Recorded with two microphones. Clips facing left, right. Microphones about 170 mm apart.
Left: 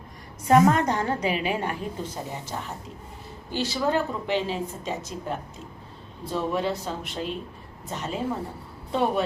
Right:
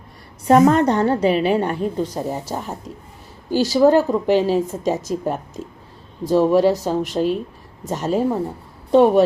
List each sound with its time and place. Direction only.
0.4 s a woman's voice: 35° right (ahead or behind)